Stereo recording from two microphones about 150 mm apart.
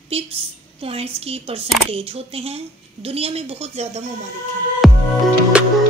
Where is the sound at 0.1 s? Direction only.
40° right (ahead or behind).